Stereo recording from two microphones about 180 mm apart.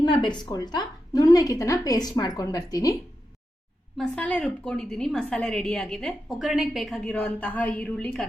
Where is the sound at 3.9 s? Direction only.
5° left (ahead or behind).